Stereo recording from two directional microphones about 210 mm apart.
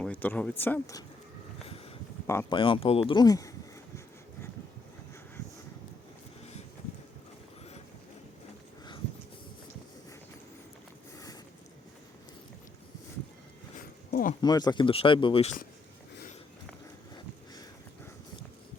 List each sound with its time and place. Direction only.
0.0 s speech: 10° left (ahead or behind)
2.2 s speech: 15° left (ahead or behind)
2.6 s speech: 25° left (ahead or behind)
14.1 s a sound: 45° left (ahead or behind)
14.4 s speech: 20° left (ahead or behind)